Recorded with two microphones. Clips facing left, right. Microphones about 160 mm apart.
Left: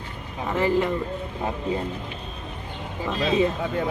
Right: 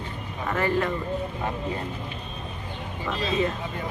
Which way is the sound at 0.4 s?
20° left (ahead or behind).